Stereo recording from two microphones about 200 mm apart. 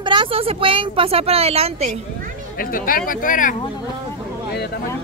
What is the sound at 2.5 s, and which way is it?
Speech, 45° left (ahead or behind).